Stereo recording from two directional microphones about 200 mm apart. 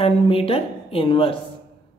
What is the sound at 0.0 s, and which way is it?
Speech, 25° left (ahead or behind).